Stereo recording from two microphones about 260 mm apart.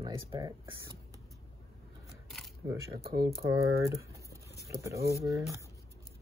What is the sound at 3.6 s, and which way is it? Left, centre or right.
Speech, centre.